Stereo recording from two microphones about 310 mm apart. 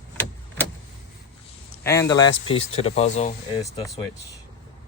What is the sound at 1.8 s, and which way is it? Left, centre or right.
Speech, centre.